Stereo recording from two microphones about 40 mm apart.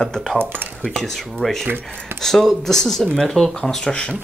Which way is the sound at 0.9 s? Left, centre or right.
Centre.